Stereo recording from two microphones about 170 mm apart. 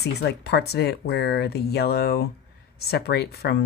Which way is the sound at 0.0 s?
75° left (ahead or behind).